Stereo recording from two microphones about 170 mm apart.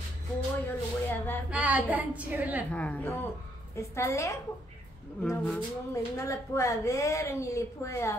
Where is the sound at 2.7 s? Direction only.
10° left (ahead or behind).